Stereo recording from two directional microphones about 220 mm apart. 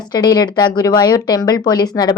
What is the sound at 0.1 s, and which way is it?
A woman's voice, 20° left (ahead or behind).